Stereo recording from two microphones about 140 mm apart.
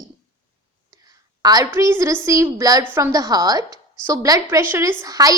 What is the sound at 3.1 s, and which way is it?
A woman's voice, 25° right (ahead or behind).